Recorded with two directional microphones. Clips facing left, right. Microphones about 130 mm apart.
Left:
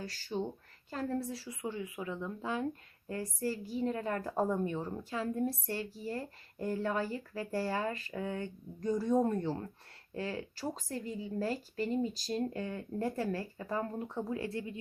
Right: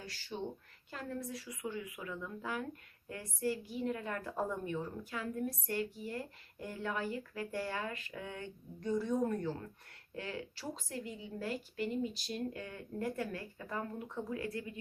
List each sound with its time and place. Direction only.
0.0 s speech: 40° left (ahead or behind)
3.1 s a woman's voice: 35° left (ahead or behind)